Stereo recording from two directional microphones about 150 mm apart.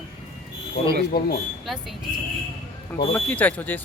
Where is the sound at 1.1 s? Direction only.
90° left.